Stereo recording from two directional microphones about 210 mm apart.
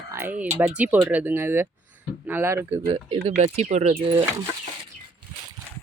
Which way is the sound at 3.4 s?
30° right (ahead or behind).